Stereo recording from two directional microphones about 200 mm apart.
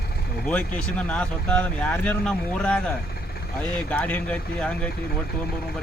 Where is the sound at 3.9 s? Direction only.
5° left (ahead or behind).